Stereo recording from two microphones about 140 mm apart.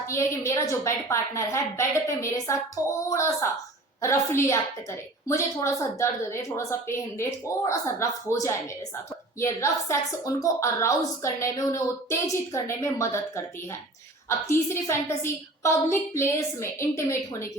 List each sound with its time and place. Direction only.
0.0 s a woman's voice: 20° left (ahead or behind)